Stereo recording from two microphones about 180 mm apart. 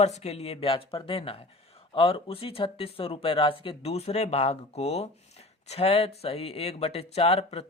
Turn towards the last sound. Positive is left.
turn(degrees=35)  # may be behind; listen again after turning